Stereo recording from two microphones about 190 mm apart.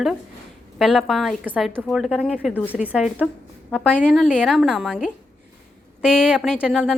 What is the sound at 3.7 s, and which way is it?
Speech, 5° left (ahead or behind).